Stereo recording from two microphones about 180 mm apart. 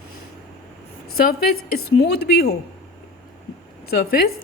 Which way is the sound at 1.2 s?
55° left (ahead or behind).